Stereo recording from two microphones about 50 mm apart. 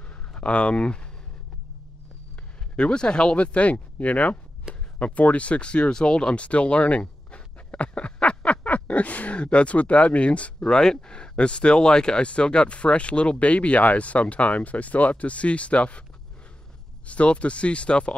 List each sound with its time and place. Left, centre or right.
0.3 s speech: left
2.7 s speech: centre
10.7 s speech: centre
17.0 s speech: left